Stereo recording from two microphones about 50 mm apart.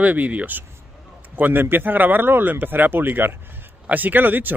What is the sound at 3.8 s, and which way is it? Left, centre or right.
Speech, right.